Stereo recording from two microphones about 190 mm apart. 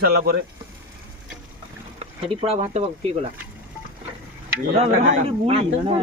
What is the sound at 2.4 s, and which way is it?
Speech, 35° right (ahead or behind).